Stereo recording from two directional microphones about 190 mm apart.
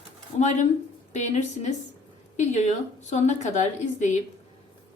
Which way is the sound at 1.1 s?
40° left (ahead or behind).